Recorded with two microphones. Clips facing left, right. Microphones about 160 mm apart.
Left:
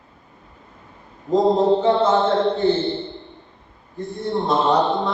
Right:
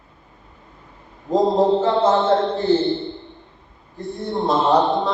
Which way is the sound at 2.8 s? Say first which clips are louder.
Right 3 dB; centre (ahead or behind).